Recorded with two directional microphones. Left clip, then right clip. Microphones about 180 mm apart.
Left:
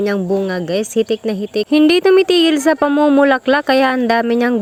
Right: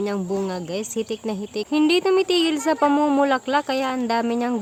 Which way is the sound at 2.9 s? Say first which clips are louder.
Left 7 dB; 20° left (ahead or behind).